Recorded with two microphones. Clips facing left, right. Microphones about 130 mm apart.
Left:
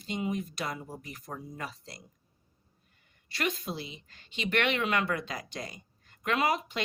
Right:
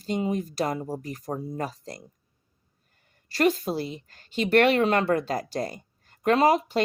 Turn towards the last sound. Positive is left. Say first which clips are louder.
# right 8 dB
turn(degrees=-35)  # may be behind; listen again after turning